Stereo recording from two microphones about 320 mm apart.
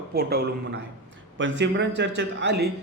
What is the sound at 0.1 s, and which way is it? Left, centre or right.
A man's voice, right.